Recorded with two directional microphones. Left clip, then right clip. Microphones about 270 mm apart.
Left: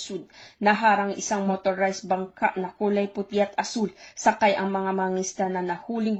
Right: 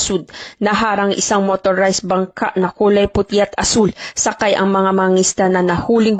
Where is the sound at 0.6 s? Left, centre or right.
Right.